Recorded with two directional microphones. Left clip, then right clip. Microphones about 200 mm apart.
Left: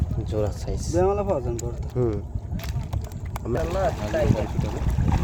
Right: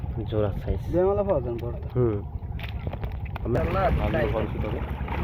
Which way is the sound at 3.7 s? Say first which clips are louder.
Left 1 dB; 55° left (ahead or behind).